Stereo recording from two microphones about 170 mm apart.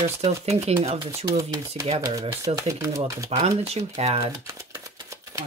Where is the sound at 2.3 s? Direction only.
15° right (ahead or behind).